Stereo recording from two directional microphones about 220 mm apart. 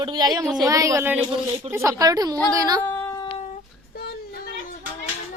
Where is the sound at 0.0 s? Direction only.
20° right (ahead or behind).